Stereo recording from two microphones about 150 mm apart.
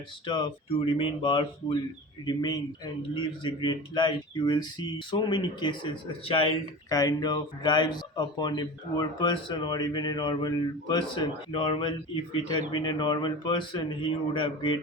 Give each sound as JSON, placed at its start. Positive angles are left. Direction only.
{"t": 0.3, "sound": "a man's voice", "side_deg": 30}
{"t": 6.9, "sound": "speech", "side_deg": 25}